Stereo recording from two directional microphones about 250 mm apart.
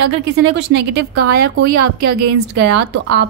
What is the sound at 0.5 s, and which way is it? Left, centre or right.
Speech, right.